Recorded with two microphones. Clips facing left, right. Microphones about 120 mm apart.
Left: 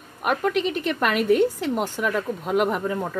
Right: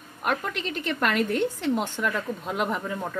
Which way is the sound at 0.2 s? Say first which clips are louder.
Left 6 dB; 5° left (ahead or behind).